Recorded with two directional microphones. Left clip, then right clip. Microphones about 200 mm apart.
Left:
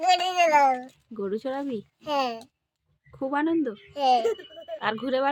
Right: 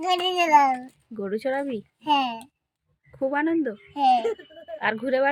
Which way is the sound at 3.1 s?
Centre (ahead or behind).